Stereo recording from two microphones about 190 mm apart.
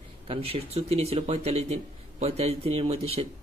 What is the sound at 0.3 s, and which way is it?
Speech, 30° right (ahead or behind).